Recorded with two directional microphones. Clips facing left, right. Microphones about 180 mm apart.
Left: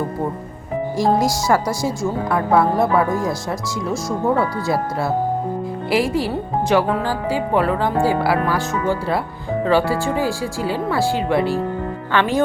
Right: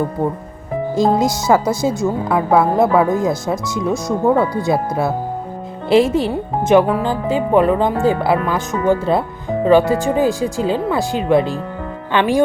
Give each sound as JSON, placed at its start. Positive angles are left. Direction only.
{"t": 0.9, "sound": "a woman's voice", "side_deg": -20}